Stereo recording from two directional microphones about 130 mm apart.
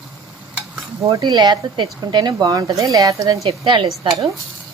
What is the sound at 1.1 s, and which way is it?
Speech, 35° right (ahead or behind).